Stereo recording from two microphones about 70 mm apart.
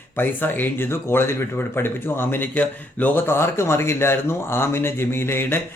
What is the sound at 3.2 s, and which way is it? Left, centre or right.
Speech, left.